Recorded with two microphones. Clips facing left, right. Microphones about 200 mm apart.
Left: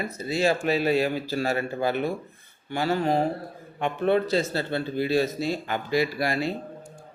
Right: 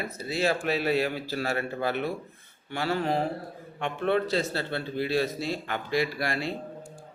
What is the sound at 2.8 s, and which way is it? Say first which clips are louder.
Mantra: left 3 dB; 40° left (ahead or behind).